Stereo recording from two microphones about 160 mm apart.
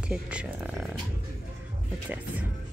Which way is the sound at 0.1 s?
5° right (ahead or behind).